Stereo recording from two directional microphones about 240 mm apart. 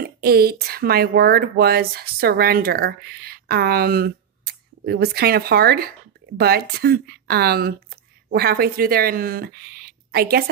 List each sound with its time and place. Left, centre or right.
0.0 s speech: right